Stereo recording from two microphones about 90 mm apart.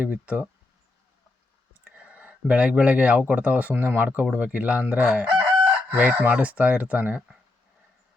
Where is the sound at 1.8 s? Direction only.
15° right (ahead or behind).